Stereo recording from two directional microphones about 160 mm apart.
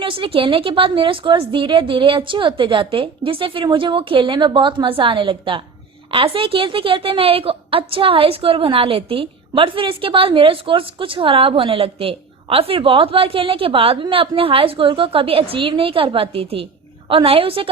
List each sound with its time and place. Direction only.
0.0 s a woman's voice: 35° right (ahead or behind)